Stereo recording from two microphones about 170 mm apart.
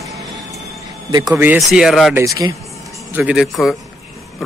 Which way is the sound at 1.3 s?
5° right (ahead or behind).